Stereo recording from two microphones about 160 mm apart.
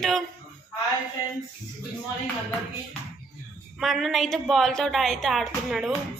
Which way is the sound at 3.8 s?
Centre (ahead or behind).